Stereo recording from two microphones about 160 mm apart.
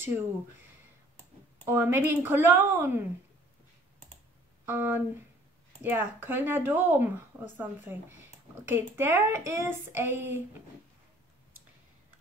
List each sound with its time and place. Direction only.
1.7 s speech: 15° right (ahead or behind)
4.6 s speech: 15° right (ahead or behind)